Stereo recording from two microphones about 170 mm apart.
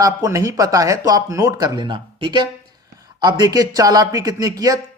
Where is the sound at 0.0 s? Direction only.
20° right (ahead or behind).